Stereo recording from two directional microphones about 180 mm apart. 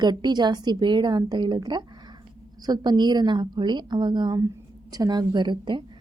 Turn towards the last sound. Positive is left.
turn(degrees=-25)  # may be behind; listen again after turning